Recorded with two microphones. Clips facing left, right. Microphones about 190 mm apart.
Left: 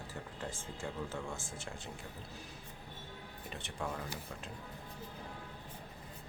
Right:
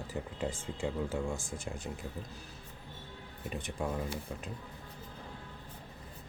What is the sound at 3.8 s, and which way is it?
Speech, 15° right (ahead or behind).